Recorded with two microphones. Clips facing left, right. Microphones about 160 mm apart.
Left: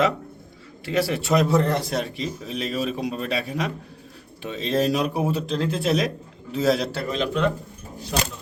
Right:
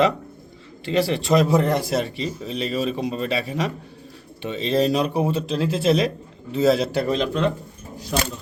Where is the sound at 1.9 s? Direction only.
Centre (ahead or behind).